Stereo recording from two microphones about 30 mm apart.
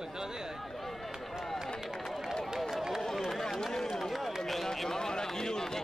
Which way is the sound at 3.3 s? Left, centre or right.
Centre.